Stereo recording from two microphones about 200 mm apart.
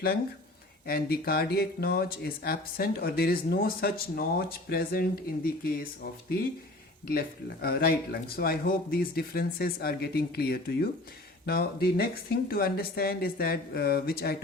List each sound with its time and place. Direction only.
0.9 s speech: 50° left (ahead or behind)
7.1 s speech: 50° left (ahead or behind)